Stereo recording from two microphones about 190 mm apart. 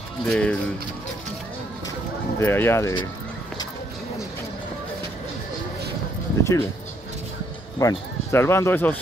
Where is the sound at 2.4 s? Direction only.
10° left (ahead or behind).